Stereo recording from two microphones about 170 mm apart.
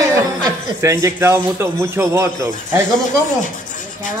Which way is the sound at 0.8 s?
15° right (ahead or behind).